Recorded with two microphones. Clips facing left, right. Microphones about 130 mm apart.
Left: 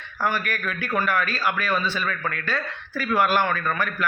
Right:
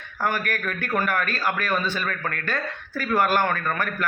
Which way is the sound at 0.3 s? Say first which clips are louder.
Even; 45° right (ahead or behind).